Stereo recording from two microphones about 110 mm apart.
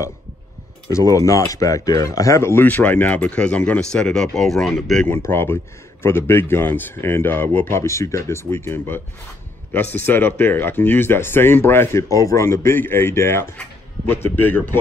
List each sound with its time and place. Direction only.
0.8 s speech: 30° left (ahead or behind); by 5.0 s centre (ahead or behind)
5.0 s speech: 20° left (ahead or behind)